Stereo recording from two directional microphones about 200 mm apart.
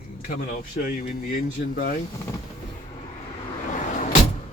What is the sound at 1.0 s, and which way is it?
Speech, 45° left (ahead or behind).